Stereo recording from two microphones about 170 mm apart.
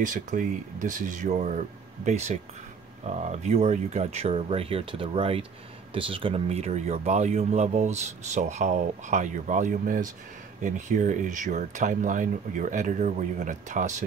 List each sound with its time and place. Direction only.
0.0 s speech: 50° right (ahead or behind)